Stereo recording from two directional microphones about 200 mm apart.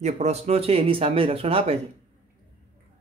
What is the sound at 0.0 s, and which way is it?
Speech, 35° right (ahead or behind).